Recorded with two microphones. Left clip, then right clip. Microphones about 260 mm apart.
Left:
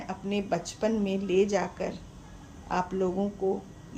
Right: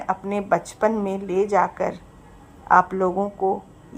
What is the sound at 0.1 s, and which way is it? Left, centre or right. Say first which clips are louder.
A woman's voice: right 9 dB; right.